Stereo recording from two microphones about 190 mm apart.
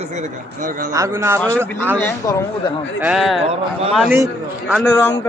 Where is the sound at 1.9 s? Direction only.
15° left (ahead or behind).